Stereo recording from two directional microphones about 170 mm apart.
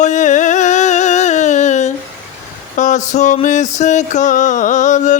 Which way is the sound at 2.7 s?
45° left (ahead or behind).